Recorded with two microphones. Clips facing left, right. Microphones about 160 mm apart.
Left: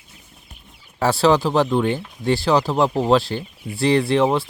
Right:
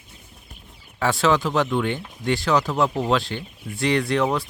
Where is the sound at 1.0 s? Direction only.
35° left (ahead or behind).